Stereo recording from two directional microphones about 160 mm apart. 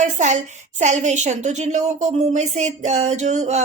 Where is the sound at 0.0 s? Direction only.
50° right (ahead or behind).